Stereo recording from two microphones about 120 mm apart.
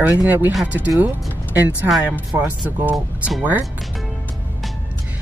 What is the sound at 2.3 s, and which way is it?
Speech, 15° right (ahead or behind).